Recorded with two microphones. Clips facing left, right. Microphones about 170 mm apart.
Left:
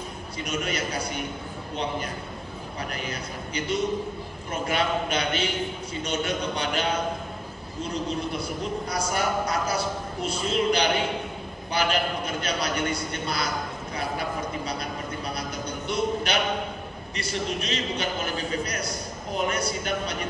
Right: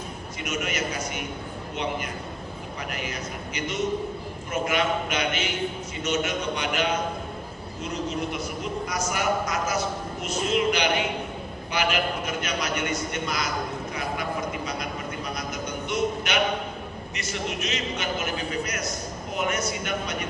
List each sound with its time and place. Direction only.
0.4 s a man's voice: 35° left (ahead or behind)
2.9 s a man's voice: 35° left (ahead or behind)
13.9 s a sound: 30° left (ahead or behind)
15.3 s music: 35° left (ahead or behind)
17.1 s a man's voice: 35° left (ahead or behind)